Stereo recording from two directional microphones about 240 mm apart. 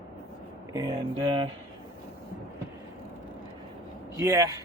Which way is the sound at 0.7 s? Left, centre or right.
Centre.